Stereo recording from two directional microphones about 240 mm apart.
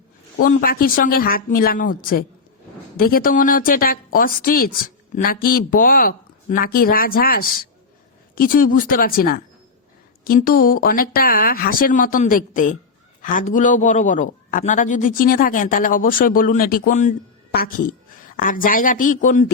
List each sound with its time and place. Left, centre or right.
0.4 s a woman's voice: left